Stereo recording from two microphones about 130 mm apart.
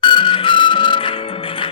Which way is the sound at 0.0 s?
40° left (ahead or behind).